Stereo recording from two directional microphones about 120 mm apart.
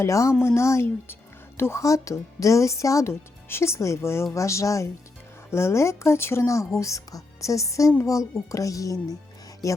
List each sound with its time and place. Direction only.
0.0 s speech: 25° left (ahead or behind)